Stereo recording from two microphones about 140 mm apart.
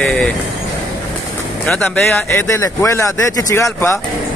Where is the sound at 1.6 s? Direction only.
5° left (ahead or behind).